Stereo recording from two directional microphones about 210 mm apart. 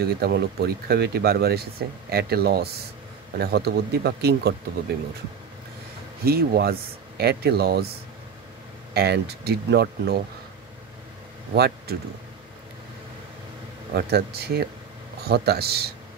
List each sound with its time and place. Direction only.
0.0 s speech: 50° right (ahead or behind)
6.2 s speech: 45° right (ahead or behind)
8.9 s speech: 50° right (ahead or behind)
11.5 s speech: 50° right (ahead or behind)
13.9 s speech: 50° right (ahead or behind)